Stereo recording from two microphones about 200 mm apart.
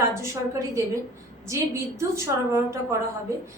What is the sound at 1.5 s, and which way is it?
A woman's voice, 15° right (ahead or behind).